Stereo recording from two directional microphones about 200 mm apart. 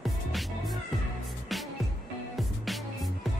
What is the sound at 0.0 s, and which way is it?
Music, centre (ahead or behind).